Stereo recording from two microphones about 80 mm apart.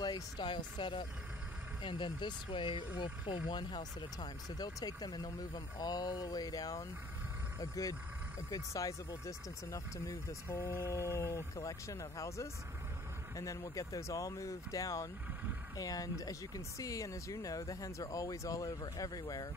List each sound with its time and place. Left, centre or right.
0.0 s speech: left
3.4 s speech: left
8.5 s speech: left